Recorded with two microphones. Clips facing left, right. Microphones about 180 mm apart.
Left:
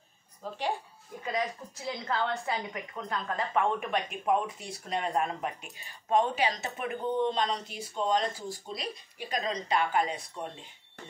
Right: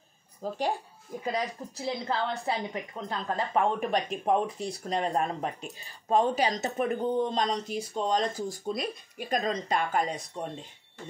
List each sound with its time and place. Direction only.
0.4 s a woman's voice: 40° right (ahead or behind)